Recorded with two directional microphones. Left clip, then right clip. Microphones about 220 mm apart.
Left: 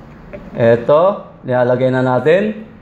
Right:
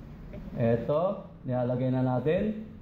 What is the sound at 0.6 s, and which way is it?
Speech, 35° left (ahead or behind).